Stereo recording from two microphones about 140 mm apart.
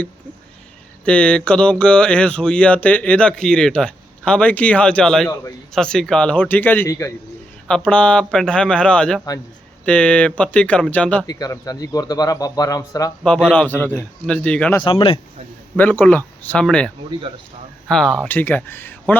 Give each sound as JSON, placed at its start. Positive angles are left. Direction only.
{"t": 1.0, "sound": "speech", "side_deg": 5}
{"t": 5.3, "sound": "speech", "side_deg": 25}
{"t": 5.7, "sound": "speech", "side_deg": 5}
{"t": 11.3, "sound": "speech", "side_deg": 25}
{"t": 13.2, "sound": "speech", "side_deg": 10}
{"t": 14.8, "sound": "speech", "side_deg": 35}
{"t": 15.7, "sound": "speech", "side_deg": 10}
{"t": 17.1, "sound": "speech", "side_deg": -35}
{"t": 17.8, "sound": "speech", "side_deg": 5}